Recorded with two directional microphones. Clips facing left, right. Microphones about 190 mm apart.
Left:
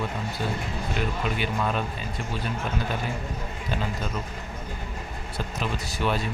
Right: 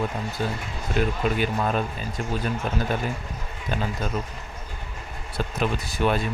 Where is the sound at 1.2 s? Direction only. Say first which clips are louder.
Right 5 dB; 45° right (ahead or behind).